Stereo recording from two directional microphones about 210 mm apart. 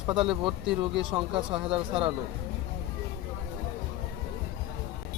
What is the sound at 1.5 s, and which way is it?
Speech, 5° right (ahead or behind).